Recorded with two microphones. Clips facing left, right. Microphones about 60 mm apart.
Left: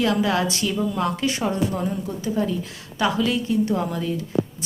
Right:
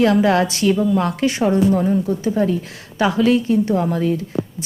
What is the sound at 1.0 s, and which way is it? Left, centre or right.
A woman's voice, right.